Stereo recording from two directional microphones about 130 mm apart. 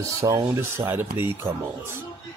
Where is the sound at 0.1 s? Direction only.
25° right (ahead or behind).